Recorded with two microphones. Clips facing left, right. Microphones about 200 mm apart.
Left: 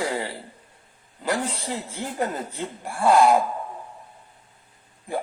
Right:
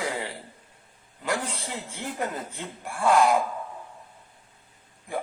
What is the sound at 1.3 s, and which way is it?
A man's voice, 35° left (ahead or behind).